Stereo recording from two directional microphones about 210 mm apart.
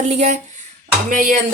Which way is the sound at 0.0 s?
35° right (ahead or behind).